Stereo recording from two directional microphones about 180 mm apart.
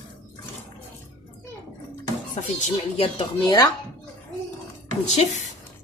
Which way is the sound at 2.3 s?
40° left (ahead or behind).